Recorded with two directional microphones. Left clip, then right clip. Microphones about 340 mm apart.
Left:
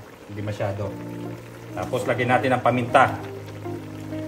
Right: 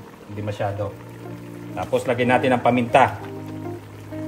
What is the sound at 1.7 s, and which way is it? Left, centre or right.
Speech, right.